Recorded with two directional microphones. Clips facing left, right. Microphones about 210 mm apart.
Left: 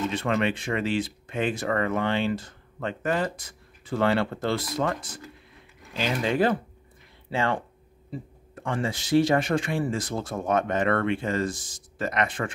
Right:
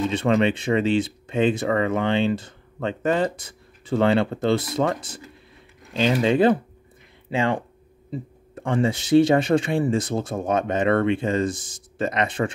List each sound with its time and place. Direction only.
0.1 s speech: 25° right (ahead or behind)
6.2 s speech: 25° right (ahead or behind)